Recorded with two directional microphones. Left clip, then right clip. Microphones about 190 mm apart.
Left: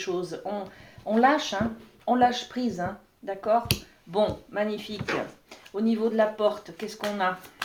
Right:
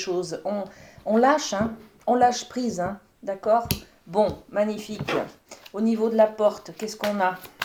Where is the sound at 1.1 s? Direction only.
50° right (ahead or behind).